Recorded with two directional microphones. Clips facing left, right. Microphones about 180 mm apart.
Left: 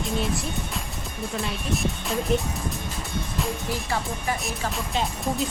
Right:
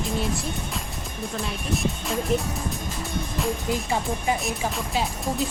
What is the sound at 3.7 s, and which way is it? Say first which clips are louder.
Speech: right 3 dB; 20° right (ahead or behind).